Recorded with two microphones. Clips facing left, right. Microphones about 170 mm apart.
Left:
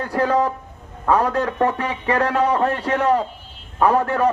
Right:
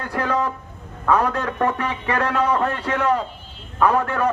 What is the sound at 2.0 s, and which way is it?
A man's voice, 35° left (ahead or behind).